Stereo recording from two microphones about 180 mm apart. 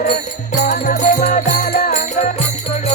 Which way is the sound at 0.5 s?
40° left (ahead or behind).